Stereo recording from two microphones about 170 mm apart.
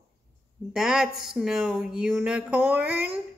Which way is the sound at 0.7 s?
5° right (ahead or behind).